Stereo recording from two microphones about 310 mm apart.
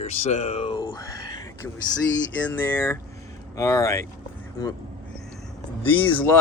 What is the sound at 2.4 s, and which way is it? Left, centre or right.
Speech, centre.